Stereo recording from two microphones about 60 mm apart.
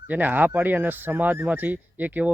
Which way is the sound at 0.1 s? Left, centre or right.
Right.